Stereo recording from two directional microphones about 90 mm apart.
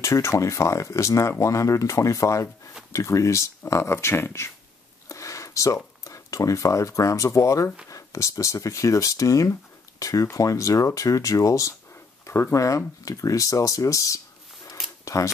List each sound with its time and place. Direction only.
0.0 s speech: 35° left (ahead or behind)
5.0 s a sound: 35° left (ahead or behind)
6.0 s speech: 35° left (ahead or behind)